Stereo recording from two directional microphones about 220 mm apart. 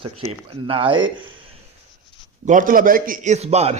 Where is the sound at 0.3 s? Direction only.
25° right (ahead or behind).